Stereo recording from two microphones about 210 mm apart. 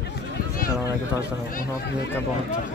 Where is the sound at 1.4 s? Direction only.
40° left (ahead or behind).